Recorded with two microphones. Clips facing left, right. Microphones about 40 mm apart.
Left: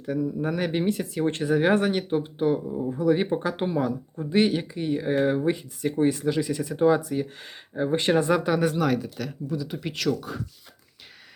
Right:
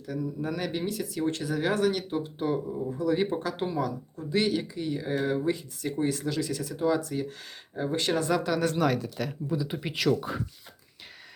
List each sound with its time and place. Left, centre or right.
0.0 s speech: left
7.0 s speech: centre
8.7 s speech: centre
9.5 s speech: centre
10.2 s speech: centre